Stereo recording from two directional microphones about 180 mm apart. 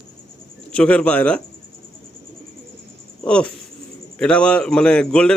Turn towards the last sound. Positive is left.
turn(degrees=5)  # may be behind; listen again after turning